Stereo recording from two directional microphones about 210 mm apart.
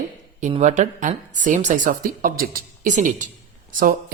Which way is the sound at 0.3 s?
35° right (ahead or behind).